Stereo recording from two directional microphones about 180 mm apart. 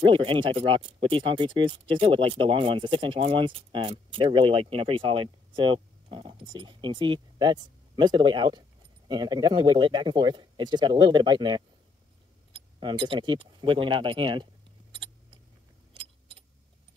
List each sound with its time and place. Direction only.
0.0 s speech: 30° right (ahead or behind)
12.8 s speech: 30° right (ahead or behind)
15.9 s keys jangling: 30° right (ahead or behind)